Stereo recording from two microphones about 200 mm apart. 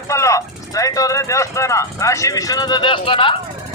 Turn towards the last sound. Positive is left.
turn(degrees=25)  # may be behind; listen again after turning